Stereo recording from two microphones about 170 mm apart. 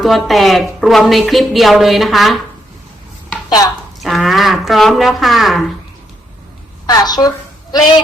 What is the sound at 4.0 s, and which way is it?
A woman's voice, centre (ahead or behind).